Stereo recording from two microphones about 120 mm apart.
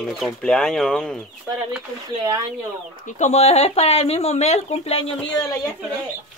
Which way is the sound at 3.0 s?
75° left (ahead or behind).